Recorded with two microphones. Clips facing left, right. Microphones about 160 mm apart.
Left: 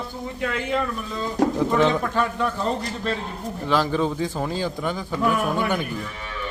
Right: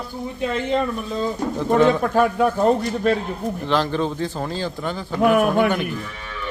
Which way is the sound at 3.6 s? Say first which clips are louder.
Even; 10° left (ahead or behind).